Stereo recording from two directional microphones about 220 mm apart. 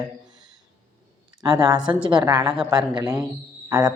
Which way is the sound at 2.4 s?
5° right (ahead or behind).